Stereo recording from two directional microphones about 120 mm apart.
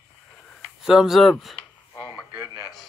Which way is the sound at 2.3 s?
25° right (ahead or behind).